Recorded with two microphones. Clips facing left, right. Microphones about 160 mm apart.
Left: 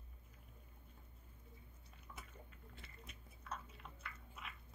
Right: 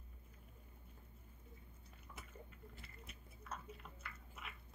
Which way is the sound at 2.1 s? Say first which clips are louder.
Left 1 dB; 5° right (ahead or behind).